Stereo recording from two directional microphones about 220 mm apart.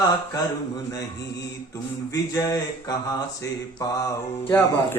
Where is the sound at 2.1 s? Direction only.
15° left (ahead or behind).